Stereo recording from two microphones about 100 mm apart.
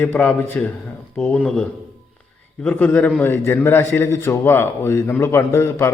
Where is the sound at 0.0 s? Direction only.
15° left (ahead or behind).